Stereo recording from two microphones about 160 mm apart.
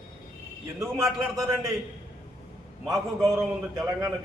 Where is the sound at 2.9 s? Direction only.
20° right (ahead or behind).